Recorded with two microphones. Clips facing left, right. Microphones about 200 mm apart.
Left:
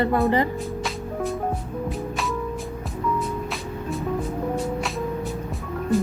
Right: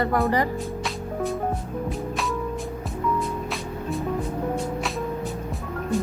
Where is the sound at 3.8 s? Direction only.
Centre (ahead or behind).